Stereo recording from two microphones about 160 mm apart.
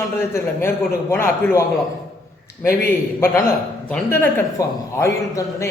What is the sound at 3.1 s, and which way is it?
A man's voice, 15° left (ahead or behind).